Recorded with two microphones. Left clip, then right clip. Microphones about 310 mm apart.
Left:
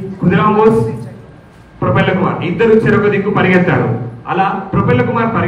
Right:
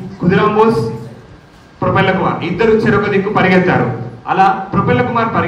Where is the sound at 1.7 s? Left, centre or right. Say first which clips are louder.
Right 1 dB; right.